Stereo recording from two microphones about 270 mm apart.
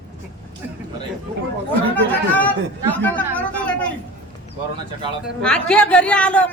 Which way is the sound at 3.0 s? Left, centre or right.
Centre.